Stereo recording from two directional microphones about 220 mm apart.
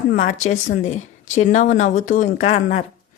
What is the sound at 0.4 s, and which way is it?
Speech, 35° left (ahead or behind).